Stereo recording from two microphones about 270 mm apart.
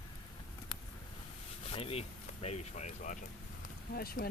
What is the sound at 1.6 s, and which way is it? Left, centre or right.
Speech, left.